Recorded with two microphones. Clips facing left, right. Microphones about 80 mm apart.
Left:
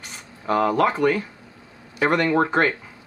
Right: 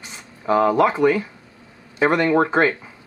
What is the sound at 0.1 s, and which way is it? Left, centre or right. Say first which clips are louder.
Speech: right 3 dB; centre.